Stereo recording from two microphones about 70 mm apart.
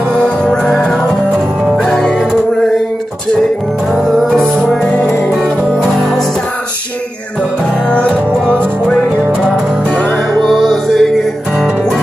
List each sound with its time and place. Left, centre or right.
0.1 s music: centre
1.3 s music: centre
1.9 s music: centre
3.9 s music: centre
5.8 s music: centre
7.9 s music: centre
9.2 s music: centre
10.4 s music: centre